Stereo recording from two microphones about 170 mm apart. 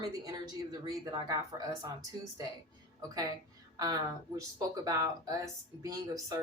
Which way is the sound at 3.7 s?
20° right (ahead or behind).